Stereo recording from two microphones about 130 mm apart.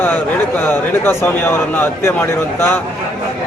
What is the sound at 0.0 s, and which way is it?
A man's voice, 15° left (ahead or behind).